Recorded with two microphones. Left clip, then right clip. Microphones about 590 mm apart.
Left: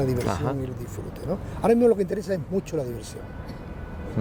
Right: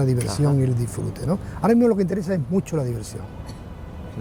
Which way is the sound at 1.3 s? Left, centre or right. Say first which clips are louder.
Right 1 dB; right.